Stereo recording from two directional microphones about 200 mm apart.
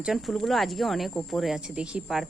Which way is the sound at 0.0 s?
Centre (ahead or behind).